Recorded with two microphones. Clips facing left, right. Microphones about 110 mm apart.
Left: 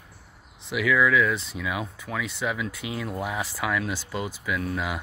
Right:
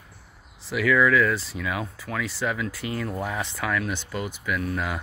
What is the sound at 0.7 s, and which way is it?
Speech, 5° left (ahead or behind).